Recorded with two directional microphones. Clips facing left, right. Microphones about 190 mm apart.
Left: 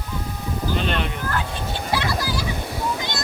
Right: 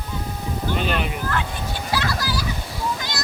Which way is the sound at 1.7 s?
20° left (ahead or behind).